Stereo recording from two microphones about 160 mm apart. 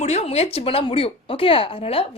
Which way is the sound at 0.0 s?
40° left (ahead or behind).